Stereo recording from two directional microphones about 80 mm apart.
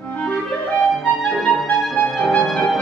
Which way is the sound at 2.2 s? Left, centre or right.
Centre.